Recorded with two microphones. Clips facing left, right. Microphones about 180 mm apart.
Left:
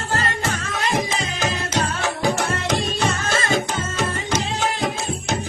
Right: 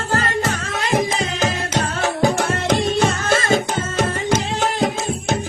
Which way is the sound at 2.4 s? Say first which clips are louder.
Right 4 dB; 50° right (ahead or behind).